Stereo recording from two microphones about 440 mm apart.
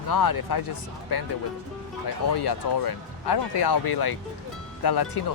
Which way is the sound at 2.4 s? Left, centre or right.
Left.